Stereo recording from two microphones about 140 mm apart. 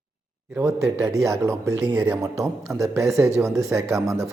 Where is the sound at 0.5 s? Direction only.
20° right (ahead or behind).